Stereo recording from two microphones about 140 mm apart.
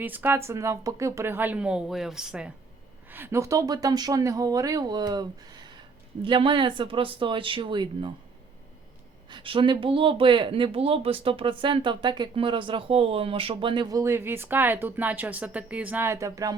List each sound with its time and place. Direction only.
0.0 s speech: 15° right (ahead or behind)
3.1 s speech: 15° right (ahead or behind); by 8.1 s 35° right (ahead or behind)
9.3 s speech: 35° right (ahead or behind)